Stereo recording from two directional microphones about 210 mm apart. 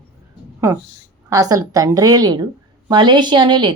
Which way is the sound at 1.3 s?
15° right (ahead or behind).